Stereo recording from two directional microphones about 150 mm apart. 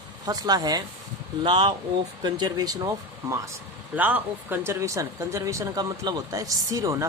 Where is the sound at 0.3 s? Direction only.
25° right (ahead or behind).